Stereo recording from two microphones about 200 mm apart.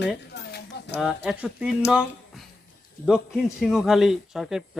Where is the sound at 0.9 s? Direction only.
5° right (ahead or behind).